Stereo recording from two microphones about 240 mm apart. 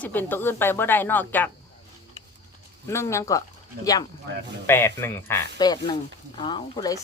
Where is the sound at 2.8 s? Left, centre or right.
Centre.